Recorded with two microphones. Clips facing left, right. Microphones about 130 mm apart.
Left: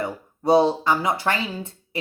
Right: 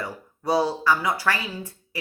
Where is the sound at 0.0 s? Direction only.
25° left (ahead or behind).